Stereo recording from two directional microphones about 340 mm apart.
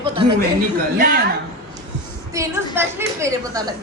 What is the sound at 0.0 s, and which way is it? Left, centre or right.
Chuckle, centre.